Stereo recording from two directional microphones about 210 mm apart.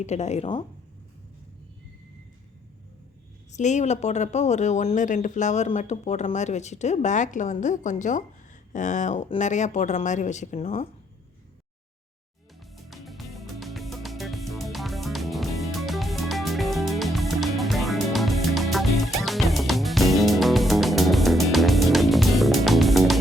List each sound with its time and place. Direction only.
0.0 s speech: 30° left (ahead or behind)
3.5 s speech: 35° left (ahead or behind)
12.7 s music: centre (ahead or behind)